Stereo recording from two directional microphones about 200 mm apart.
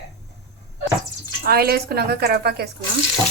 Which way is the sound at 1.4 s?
50° right (ahead or behind).